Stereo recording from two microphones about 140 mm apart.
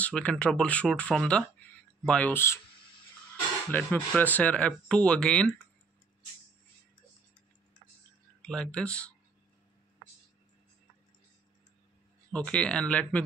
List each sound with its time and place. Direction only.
0.0 s speech: 10° left (ahead or behind)
3.7 s speech: 10° left (ahead or behind)
8.4 s speech: 5° left (ahead or behind)
12.3 s speech: 5° left (ahead or behind)